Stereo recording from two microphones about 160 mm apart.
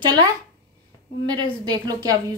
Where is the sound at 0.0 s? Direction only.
25° right (ahead or behind).